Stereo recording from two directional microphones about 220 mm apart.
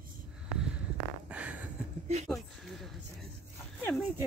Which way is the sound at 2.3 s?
Centre (ahead or behind).